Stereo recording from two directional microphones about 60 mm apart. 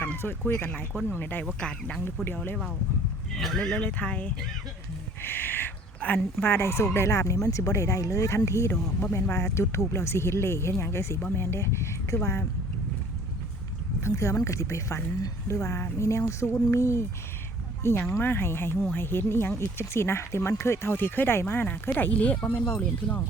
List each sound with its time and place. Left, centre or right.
0.0 s speech: left
1.5 s speech: centre
2.2 s speech: left
3.3 s speech: centre
3.6 s speech: left
5.2 s a sound: left
6.4 s speech: left
8.7 s speech: left
9.1 s speech: left
14.0 s speech: left